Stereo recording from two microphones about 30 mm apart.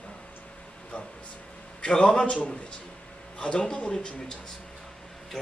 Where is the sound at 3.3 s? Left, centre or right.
Left.